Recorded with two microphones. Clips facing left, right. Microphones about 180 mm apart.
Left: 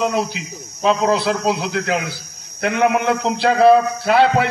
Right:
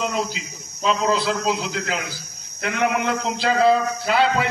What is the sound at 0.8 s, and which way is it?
A man's voice, 60° left (ahead or behind).